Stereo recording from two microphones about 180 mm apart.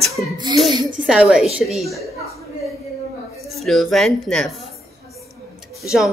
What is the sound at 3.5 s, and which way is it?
A woman's voice, centre (ahead or behind).